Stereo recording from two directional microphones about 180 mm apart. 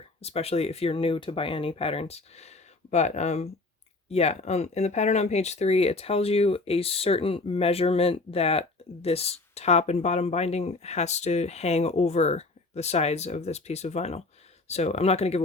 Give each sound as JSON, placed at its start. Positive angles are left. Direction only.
{"t": 0.2, "sound": "speech", "side_deg": 35}